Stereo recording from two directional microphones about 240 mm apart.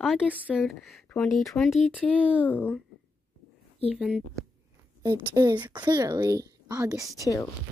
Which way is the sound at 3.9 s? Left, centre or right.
Centre.